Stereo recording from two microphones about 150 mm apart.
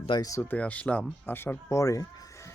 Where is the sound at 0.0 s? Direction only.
30° left (ahead or behind).